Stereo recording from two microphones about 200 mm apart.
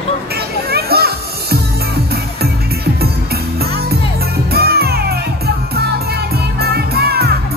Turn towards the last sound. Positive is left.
turn(degrees=-50)  # may be behind; listen again after turning